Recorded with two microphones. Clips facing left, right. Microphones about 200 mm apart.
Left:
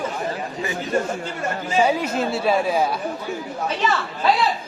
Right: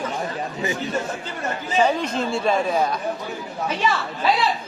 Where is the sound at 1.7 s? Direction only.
10° left (ahead or behind).